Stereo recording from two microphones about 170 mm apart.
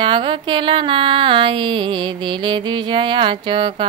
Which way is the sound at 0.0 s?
30° right (ahead or behind).